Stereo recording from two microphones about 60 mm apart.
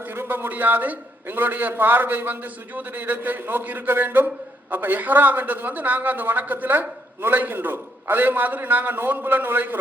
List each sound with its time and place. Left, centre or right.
0.1 s a man's voice: right